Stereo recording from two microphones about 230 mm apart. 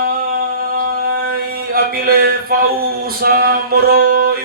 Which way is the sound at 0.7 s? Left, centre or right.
Right.